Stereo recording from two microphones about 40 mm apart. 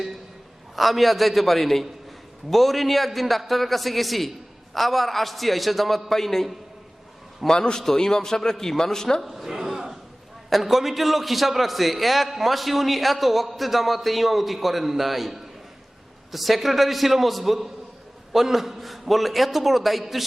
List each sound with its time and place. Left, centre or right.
0.8 s a man's voice: centre
7.4 s a man's voice: centre
9.2 s a sound: centre
10.5 s a man's voice: centre